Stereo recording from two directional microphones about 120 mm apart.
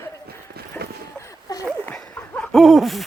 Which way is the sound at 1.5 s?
30° left (ahead or behind).